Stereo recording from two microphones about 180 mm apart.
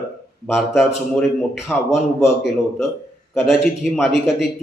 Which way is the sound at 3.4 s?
Centre (ahead or behind).